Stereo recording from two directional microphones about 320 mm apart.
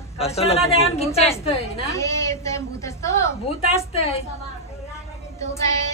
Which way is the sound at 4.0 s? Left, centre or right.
Centre.